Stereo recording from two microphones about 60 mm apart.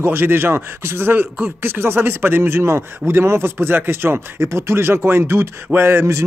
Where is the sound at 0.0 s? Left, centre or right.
Right.